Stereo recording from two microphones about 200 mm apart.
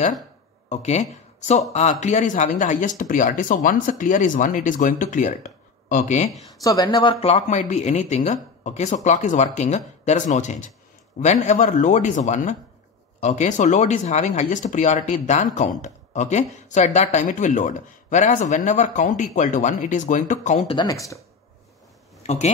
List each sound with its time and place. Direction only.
0.7 s speech: 35° left (ahead or behind)
6.6 s speech: 20° left (ahead or behind); by 20.7 s 35° left (ahead or behind)
20.7 s speech: 20° left (ahead or behind)
22.2 s speech: 35° left (ahead or behind)